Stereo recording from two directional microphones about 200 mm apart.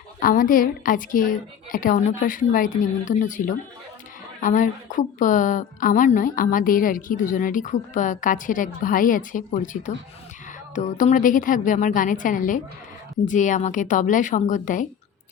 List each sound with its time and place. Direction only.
0.2 s a woman's voice: 45° left (ahead or behind)